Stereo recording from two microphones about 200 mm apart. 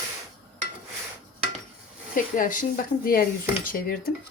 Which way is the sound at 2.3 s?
40° left (ahead or behind).